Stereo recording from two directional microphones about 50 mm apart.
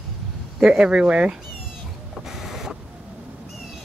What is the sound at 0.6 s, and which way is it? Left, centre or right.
Speech, centre.